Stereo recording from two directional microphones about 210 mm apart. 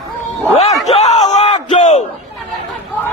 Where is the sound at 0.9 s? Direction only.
30° left (ahead or behind).